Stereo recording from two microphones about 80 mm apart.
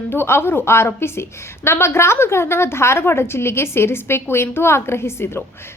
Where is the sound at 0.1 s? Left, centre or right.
Left.